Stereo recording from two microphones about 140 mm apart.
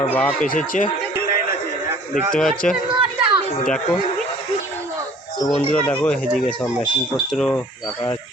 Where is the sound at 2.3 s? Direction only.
5° left (ahead or behind).